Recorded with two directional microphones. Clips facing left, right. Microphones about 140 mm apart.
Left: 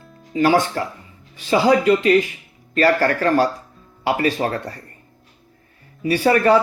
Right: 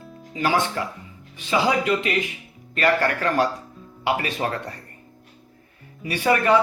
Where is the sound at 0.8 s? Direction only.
40° left (ahead or behind).